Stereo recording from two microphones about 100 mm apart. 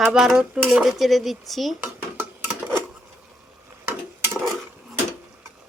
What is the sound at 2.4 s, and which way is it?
Dishes, 20° right (ahead or behind).